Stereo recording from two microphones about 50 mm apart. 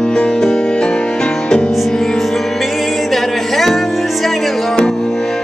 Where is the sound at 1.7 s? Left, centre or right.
Centre.